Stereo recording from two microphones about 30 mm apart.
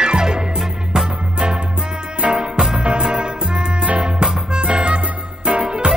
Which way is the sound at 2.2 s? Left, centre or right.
Right.